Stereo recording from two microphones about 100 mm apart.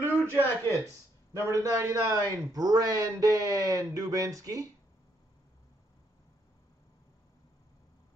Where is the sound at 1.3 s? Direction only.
30° right (ahead or behind).